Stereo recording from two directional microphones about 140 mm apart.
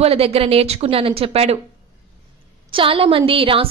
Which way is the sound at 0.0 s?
45° right (ahead or behind).